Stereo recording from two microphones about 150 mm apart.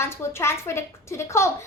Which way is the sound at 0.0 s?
15° left (ahead or behind).